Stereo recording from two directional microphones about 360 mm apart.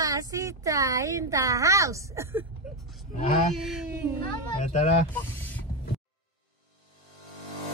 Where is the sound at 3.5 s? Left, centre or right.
Centre.